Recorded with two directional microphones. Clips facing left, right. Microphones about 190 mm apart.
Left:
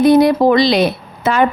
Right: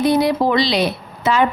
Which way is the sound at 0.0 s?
50° left (ahead or behind).